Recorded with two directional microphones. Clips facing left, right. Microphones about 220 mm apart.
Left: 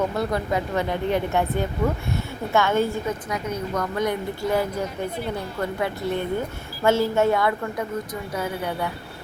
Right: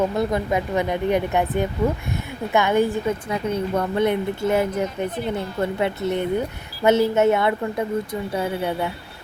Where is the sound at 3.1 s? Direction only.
25° right (ahead or behind).